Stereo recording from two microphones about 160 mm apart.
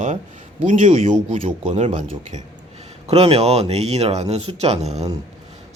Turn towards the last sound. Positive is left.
turn(degrees=-45)  # may be behind; listen again after turning